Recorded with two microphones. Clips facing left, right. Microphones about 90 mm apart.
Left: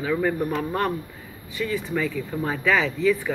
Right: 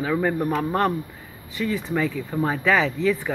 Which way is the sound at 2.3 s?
20° right (ahead or behind).